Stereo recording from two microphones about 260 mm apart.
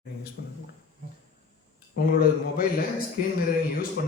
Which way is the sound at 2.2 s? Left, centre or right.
Left.